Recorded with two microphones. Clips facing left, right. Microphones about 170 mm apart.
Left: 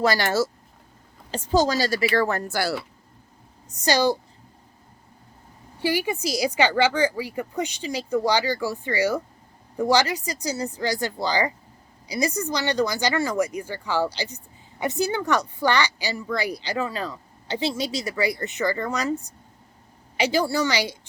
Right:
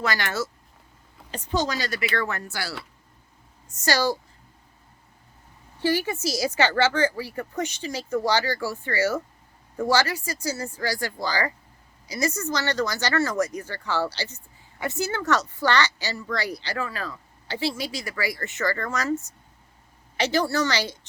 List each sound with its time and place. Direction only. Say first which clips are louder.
0.0 s speech: left 6 dB; 35° left (ahead or behind)
3.8 s speech: left 3 dB; 15° left (ahead or behind)
5.8 s speech: even; 15° left (ahead or behind)
20.1 s speech: left 1 dB; 10° left (ahead or behind)